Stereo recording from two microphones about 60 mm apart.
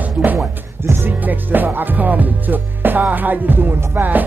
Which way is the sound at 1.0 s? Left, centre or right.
Right.